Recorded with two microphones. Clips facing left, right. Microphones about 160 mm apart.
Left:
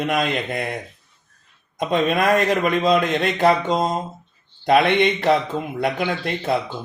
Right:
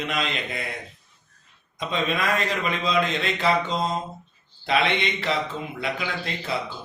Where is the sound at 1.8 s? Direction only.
50° left (ahead or behind).